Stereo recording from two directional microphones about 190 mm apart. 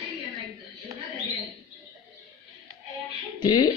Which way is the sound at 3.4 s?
25° left (ahead or behind).